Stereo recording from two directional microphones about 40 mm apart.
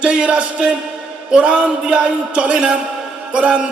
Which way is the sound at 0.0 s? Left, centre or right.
Right.